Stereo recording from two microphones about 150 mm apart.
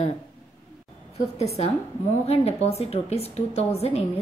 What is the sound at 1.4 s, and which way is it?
A woman's voice, 45° left (ahead or behind).